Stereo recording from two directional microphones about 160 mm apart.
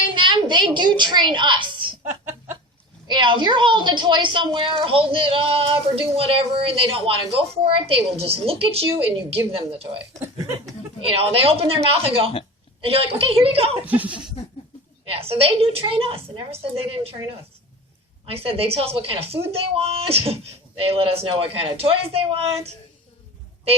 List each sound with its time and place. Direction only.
0.1 s a child's voice: 30° right (ahead or behind)
3.1 s a woman's voice: 30° right (ahead or behind)
10.2 s a woman's voice: 20° right (ahead or behind)
11.0 s speech: 35° right (ahead or behind)
13.8 s speech: 10° right (ahead or behind)
15.1 s speech: 35° right (ahead or behind)